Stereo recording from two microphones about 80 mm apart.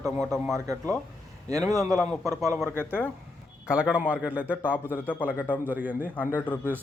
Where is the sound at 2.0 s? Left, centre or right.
Right.